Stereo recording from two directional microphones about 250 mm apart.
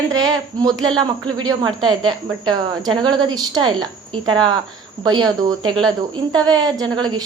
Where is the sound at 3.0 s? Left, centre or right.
Centre.